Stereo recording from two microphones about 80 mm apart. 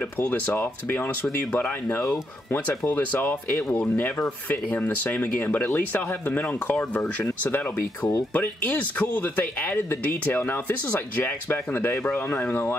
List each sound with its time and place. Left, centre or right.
0.6 s speech: left